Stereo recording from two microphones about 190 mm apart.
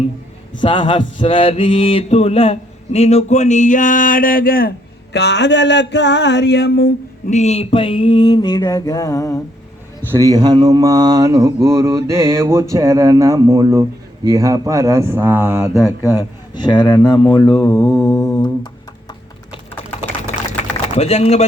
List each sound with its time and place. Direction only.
0.6 s mantra: 25° left (ahead or behind); by 4.7 s 50° left (ahead or behind)
5.1 s a sound: 65° left (ahead or behind)
7.3 s mantra: 35° left (ahead or behind); by 9.4 s 15° left (ahead or behind)
10.1 s mantra: 15° right (ahead or behind)
16.0 s mantra: 20° left (ahead or behind)
17.7 s mantra: 5° left (ahead or behind)
18.0 s mantra: 15° left (ahead or behind)
20.9 s mantra: 35° left (ahead or behind)